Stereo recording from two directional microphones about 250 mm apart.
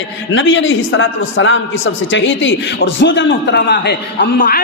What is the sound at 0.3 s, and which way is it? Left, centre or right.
A man's voice, left.